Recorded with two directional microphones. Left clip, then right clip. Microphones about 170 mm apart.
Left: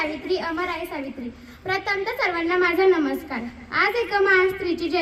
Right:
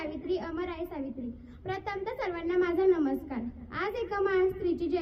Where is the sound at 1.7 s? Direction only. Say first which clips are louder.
Left 10 dB; 25° right (ahead or behind).